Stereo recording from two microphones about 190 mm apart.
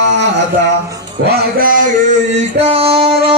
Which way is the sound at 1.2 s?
55° right (ahead or behind).